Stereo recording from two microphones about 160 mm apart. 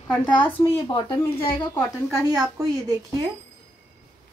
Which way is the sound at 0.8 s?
30° left (ahead or behind).